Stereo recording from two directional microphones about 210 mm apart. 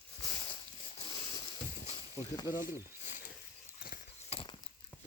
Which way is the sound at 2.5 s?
40° left (ahead or behind).